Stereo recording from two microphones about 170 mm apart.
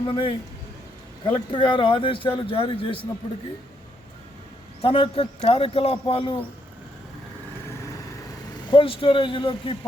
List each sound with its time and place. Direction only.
0.0 s a man's voice: 30° left (ahead or behind)
4.8 s a man's voice: 35° left (ahead or behind)
8.7 s a man's voice: 30° left (ahead or behind)